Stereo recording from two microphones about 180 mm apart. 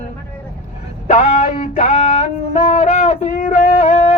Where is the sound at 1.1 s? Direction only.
40° left (ahead or behind).